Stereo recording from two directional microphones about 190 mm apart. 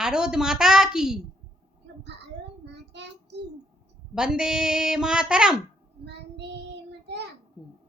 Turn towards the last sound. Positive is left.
turn(degrees=0)  # may be behind; listen again after turning